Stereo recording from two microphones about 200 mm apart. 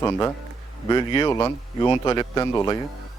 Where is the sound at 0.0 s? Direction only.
15° left (ahead or behind).